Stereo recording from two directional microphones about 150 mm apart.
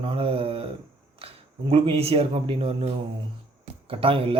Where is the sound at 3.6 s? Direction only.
40° right (ahead or behind).